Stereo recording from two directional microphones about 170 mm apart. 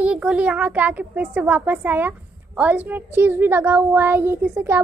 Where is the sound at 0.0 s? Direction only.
5° right (ahead or behind).